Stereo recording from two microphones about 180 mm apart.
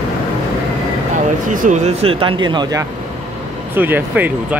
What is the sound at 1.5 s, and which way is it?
Speech, 45° right (ahead or behind).